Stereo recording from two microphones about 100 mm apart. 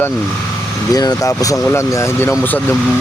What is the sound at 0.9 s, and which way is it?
Speech, 40° left (ahead or behind).